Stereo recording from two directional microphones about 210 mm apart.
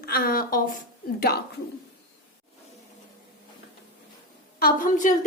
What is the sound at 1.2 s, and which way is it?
Speech, 50° left (ahead or behind).